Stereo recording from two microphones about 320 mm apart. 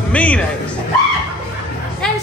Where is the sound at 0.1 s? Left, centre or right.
Centre.